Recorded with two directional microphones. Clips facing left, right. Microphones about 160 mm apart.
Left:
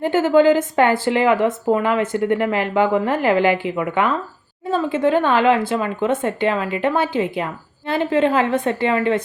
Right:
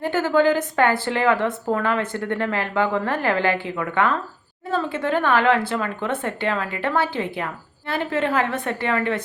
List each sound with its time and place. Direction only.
0.0 s speech: 20° left (ahead or behind)